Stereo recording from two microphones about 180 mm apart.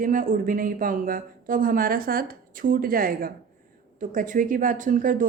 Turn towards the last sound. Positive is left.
turn(degrees=-45)  # may be behind; listen again after turning